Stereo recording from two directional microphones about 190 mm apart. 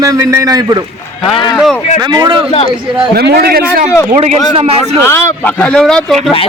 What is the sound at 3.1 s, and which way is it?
Speech, 55° right (ahead or behind).